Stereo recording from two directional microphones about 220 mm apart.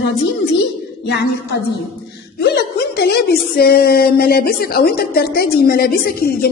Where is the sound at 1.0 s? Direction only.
50° left (ahead or behind).